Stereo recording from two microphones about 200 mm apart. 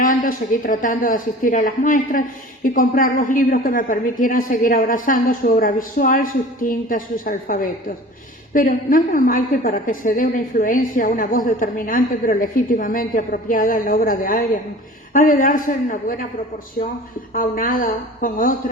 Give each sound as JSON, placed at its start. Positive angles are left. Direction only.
{"t": 0.0, "sound": "a woman's voice", "side_deg": 40}
{"t": 17.3, "sound": "a woman's voice", "side_deg": 45}